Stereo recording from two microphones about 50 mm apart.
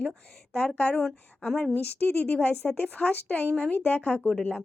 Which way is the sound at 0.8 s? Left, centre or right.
Left.